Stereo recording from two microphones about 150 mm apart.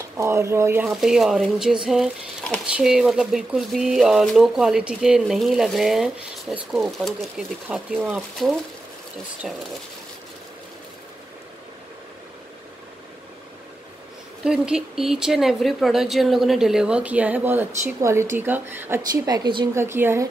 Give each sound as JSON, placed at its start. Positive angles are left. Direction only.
{"t": 0.2, "sound": "speech", "side_deg": -20}
{"t": 0.8, "sound": "speech", "side_deg": 0}
{"t": 7.6, "sound": "speech", "side_deg": -10}
{"t": 14.4, "sound": "speech", "side_deg": -5}
{"t": 19.2, "sound": "speech", "side_deg": -25}
{"t": 19.7, "sound": "speech", "side_deg": -15}